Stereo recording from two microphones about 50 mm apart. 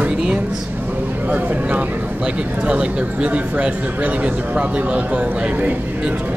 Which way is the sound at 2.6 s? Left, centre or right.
Right.